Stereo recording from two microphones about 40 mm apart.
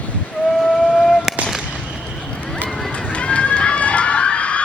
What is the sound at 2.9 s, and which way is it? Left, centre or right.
Run, left.